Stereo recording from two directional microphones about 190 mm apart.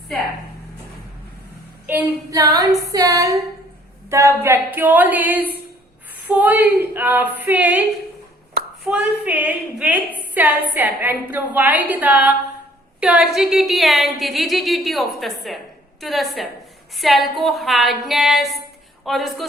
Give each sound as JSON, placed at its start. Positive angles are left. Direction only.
{"t": 1.9, "sound": "a woman's voice", "side_deg": -20}